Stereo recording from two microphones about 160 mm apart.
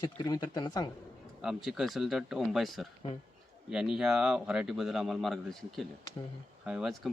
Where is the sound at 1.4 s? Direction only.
5° right (ahead or behind).